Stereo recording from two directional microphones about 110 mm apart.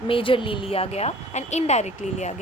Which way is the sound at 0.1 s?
55° left (ahead or behind).